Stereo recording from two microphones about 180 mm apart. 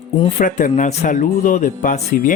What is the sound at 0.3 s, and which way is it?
Speech, 45° left (ahead or behind).